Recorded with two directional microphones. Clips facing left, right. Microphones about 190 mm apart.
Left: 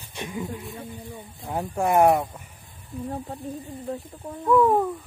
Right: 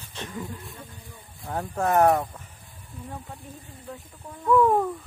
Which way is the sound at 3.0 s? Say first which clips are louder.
Left 7 dB; 30° left (ahead or behind).